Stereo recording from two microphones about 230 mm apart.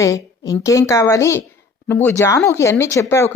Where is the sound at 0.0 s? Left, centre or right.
Centre.